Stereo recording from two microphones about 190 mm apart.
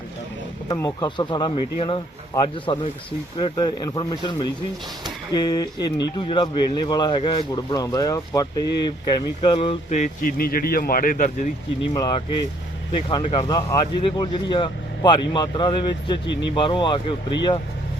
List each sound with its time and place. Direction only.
0.7 s a man's voice: 20° left (ahead or behind); by 11.4 s 45° left (ahead or behind)
11.8 s a man's voice: 25° left (ahead or behind)
16.2 s speech: 70° left (ahead or behind)
16.6 s a man's voice: 25° left (ahead or behind)